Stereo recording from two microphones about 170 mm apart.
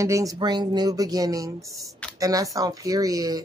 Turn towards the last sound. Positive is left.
turn(degrees=-20)  # may be behind; listen again after turning